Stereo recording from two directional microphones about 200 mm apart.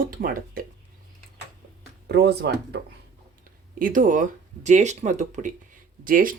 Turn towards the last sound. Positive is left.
turn(degrees=-45)  # may be behind; listen again after turning